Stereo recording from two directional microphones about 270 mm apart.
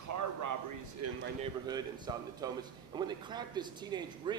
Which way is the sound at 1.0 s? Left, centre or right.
Right.